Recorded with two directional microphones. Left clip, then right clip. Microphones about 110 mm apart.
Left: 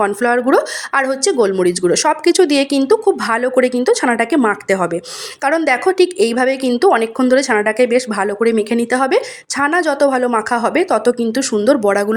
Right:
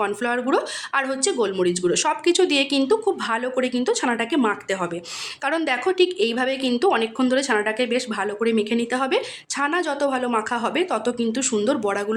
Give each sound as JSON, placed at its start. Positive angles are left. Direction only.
{"t": 0.0, "sound": "speech", "side_deg": 50}
{"t": 5.4, "sound": "speech", "side_deg": 50}